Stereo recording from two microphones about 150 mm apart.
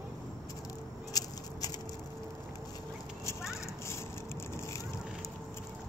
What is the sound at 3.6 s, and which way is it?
Children playing, 20° left (ahead or behind).